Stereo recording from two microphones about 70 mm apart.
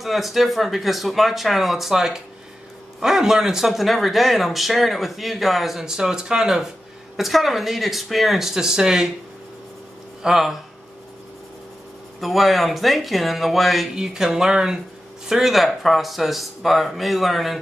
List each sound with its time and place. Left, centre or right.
0.0 s speech: centre
10.2 s speech: centre
12.2 s speech: centre